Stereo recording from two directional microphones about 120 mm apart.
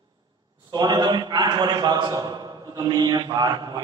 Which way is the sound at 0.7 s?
35° right (ahead or behind).